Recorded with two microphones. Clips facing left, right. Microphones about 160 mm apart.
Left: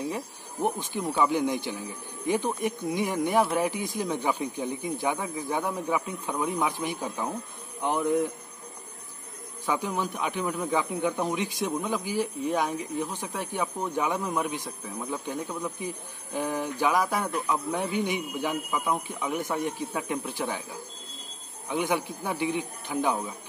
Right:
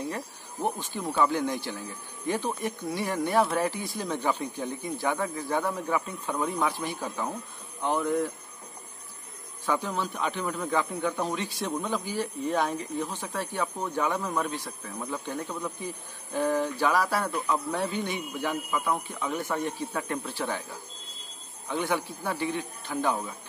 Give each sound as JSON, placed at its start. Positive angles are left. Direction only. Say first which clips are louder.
{"t": 0.0, "sound": "speech", "louder": "left 2 dB", "side_deg": 15}
{"t": 9.7, "sound": "speech", "louder": "even", "side_deg": 15}
{"t": 21.6, "sound": "speech", "louder": "left 1 dB", "side_deg": 15}